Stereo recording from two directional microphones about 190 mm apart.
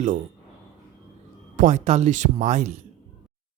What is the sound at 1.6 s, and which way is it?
Speech, 40° right (ahead or behind).